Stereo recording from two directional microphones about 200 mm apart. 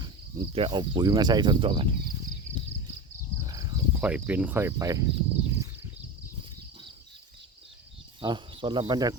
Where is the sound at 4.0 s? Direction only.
5° right (ahead or behind).